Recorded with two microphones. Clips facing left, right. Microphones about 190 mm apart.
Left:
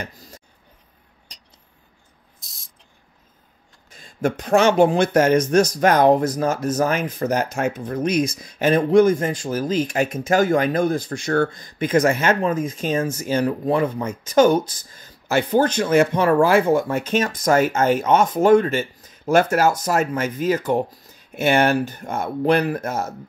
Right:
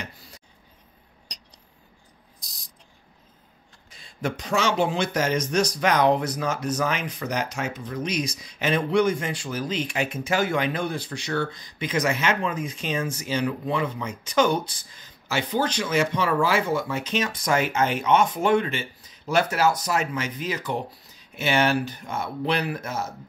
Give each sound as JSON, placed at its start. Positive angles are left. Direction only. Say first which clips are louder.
{"t": 0.0, "sound": "speech", "louder": "left 5 dB", "side_deg": 45}
{"t": 2.4, "sound": "cricket", "louder": "right 1 dB", "side_deg": 0}
{"t": 3.9, "sound": "speech", "louder": "left 7 dB", "side_deg": 45}